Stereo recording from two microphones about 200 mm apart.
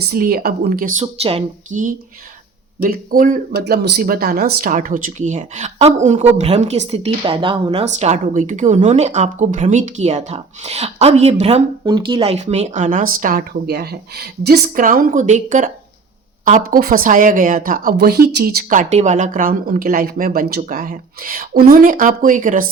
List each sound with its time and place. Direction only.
0.1 s a woman's voice: 50° right (ahead or behind)
1.0 s a woman's voice: 30° right (ahead or behind)